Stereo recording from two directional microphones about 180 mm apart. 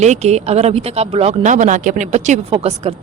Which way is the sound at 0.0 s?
40° right (ahead or behind).